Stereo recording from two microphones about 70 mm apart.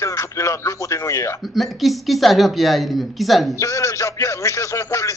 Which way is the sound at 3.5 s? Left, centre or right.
Left.